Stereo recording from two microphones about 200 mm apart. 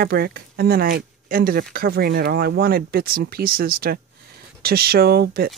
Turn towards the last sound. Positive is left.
turn(degrees=-50)  # may be behind; listen again after turning